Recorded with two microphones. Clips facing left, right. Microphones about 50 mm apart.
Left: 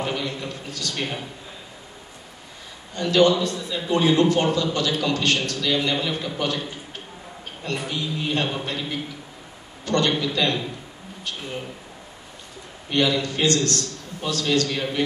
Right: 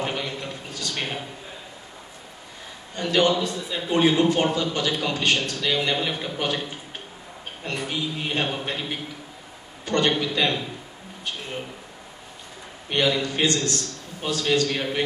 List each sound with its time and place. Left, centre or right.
0.0 s a sound: right
3.0 s a man's voice: right
7.6 s a man's voice: right
9.8 s a man's voice: right
12.9 s a man's voice: right